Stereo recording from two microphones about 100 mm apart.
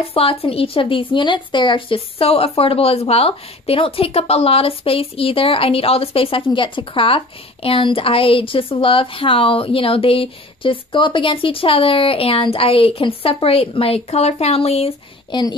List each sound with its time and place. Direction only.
0.1 s a woman's voice: 70° left (ahead or behind); by 15.0 s 85° left
15.3 s a woman's voice: 50° left (ahead or behind)